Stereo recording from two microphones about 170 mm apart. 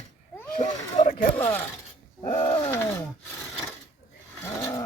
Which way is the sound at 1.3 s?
10° left (ahead or behind).